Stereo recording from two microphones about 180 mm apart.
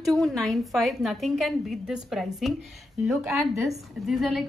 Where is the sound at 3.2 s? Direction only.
15° right (ahead or behind).